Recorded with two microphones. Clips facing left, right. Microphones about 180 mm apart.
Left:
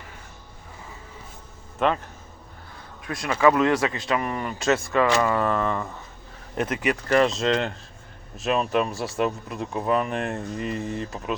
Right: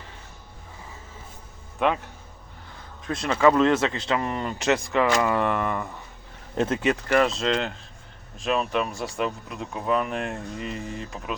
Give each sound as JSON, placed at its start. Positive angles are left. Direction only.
{"t": 3.1, "sound": "speech", "side_deg": -25}
{"t": 5.2, "sound": "mantra", "side_deg": -15}
{"t": 6.6, "sound": "speech", "side_deg": -25}
{"t": 7.2, "sound": "speech", "side_deg": 0}